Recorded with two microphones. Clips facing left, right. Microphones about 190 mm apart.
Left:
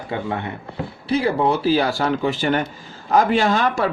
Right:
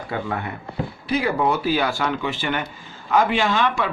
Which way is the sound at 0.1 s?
25° left (ahead or behind).